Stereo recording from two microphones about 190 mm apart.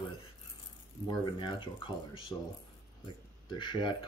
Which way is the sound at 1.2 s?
25° left (ahead or behind).